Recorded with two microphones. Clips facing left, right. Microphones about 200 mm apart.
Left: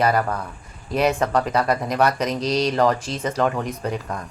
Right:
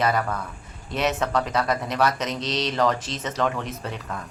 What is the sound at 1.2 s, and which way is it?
Speech, 35° left (ahead or behind).